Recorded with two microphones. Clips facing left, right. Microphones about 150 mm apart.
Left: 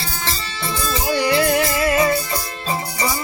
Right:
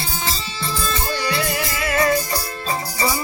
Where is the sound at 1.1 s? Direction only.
15° left (ahead or behind).